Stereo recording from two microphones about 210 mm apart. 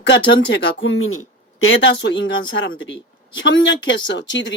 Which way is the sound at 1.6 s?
60° left (ahead or behind).